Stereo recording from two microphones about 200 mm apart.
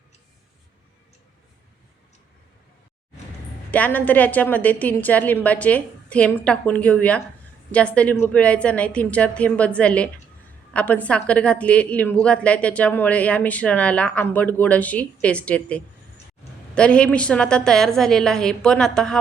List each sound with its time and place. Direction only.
3.7 s a woman's voice: 10° left (ahead or behind)